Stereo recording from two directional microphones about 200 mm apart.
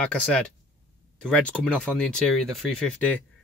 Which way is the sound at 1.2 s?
5° left (ahead or behind).